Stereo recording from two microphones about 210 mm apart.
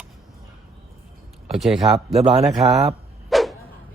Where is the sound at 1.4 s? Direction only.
Centre (ahead or behind).